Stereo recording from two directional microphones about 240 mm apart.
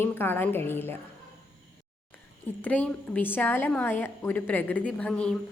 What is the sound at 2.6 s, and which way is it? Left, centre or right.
A woman's voice, centre.